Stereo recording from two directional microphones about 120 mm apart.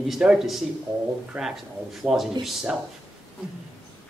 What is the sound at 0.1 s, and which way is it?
Speech, 5° right (ahead or behind).